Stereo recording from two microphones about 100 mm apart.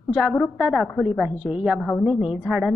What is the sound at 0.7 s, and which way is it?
A woman's voice, centre (ahead or behind).